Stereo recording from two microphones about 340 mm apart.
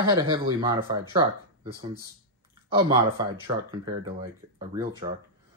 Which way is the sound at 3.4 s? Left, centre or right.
Centre.